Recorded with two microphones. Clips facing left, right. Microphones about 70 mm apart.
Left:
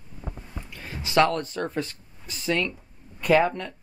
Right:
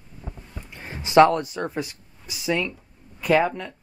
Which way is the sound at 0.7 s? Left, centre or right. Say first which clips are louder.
Right 6 dB; right.